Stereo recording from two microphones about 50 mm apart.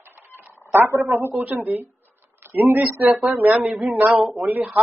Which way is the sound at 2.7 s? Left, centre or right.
Right.